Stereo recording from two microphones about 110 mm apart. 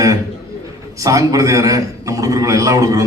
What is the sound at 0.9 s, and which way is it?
A man's voice, 30° right (ahead or behind).